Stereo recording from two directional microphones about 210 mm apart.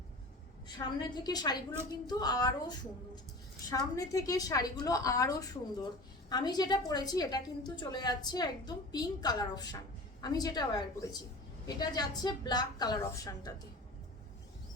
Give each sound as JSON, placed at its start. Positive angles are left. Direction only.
{"t": 0.9, "sound": "a woman's voice", "side_deg": 20}